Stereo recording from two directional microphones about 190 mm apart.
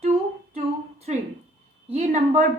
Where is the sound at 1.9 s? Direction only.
40° right (ahead or behind).